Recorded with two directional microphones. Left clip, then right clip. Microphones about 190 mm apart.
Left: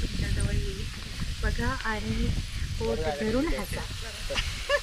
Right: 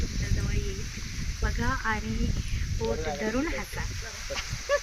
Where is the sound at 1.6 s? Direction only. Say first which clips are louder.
Right 3 dB; 5° right (ahead or behind).